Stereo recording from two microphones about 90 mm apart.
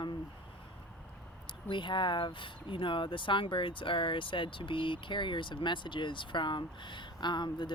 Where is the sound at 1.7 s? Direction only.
60° left (ahead or behind).